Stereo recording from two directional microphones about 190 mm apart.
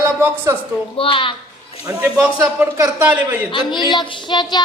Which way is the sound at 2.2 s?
15° right (ahead or behind).